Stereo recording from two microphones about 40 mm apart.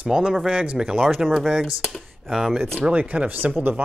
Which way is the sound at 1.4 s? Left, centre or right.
Right.